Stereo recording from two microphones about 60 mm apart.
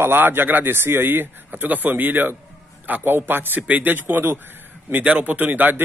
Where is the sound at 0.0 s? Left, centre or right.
Right.